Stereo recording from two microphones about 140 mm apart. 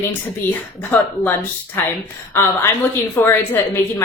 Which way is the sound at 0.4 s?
15° left (ahead or behind).